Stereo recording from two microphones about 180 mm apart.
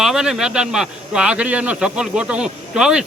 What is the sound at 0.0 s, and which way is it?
A man's voice, centre (ahead or behind).